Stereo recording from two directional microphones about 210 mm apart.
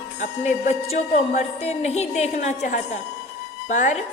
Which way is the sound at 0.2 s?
35° left (ahead or behind).